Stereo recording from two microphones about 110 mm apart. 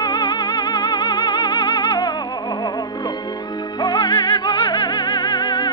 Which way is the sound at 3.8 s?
40° left (ahead or behind).